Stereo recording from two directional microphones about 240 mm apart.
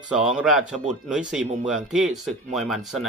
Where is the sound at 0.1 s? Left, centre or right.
Centre.